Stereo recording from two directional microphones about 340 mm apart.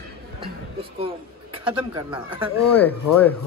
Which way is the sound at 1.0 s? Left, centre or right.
Centre.